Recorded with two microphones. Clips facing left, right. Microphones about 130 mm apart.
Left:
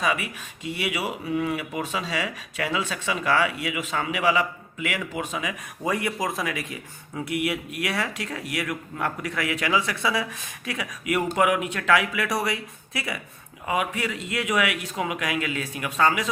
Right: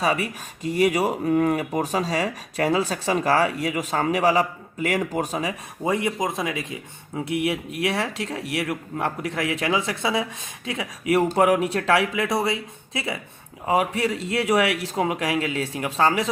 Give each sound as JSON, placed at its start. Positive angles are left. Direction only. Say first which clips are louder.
{"t": 0.0, "sound": "speech", "louder": "right 3 dB", "side_deg": -40}
{"t": 5.9, "sound": "speech", "louder": "right 3 dB", "side_deg": -25}